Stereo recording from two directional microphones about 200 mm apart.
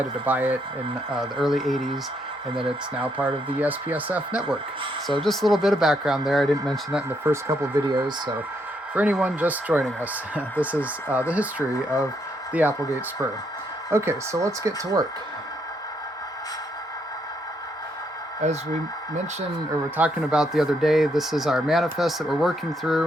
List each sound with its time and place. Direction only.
0.3 s speech: 10° right (ahead or behind)
7.3 s speech: 15° right (ahead or behind)
9.0 s speech: 5° right (ahead or behind)
12.5 s speech: 10° right (ahead or behind)
18.4 s speech: 35° right (ahead or behind)
20.0 s speech: 5° right (ahead or behind)